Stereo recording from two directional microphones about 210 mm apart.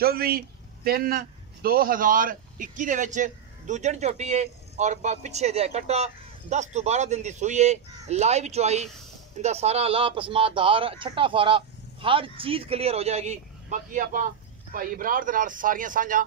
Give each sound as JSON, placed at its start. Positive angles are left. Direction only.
{"t": 0.0, "sound": "a man's voice", "side_deg": -45}